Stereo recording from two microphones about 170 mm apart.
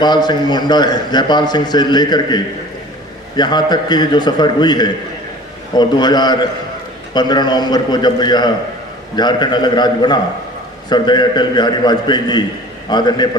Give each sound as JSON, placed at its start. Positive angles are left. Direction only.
{"t": 0.0, "sound": "a man's voice", "side_deg": 25}